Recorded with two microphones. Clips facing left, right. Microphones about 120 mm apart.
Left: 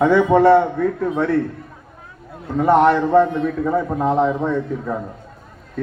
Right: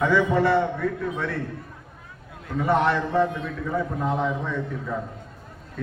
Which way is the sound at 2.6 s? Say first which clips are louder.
Left 8 dB; 50° left (ahead or behind).